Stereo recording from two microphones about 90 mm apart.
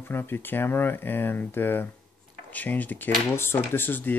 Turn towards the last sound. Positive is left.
turn(degrees=20)  # may be behind; listen again after turning